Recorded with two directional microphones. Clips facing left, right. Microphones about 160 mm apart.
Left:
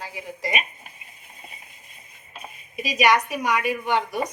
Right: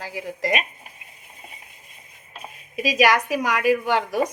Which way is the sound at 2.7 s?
90° right.